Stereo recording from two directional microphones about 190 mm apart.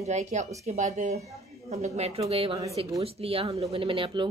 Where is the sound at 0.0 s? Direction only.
35° right (ahead or behind).